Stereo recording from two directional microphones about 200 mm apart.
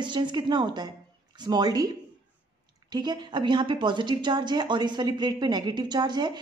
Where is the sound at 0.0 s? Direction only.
25° right (ahead or behind).